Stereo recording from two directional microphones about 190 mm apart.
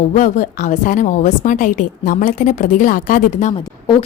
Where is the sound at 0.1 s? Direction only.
40° left (ahead or behind).